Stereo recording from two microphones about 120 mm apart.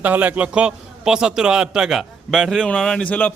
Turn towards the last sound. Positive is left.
turn(degrees=15)  # may be behind; listen again after turning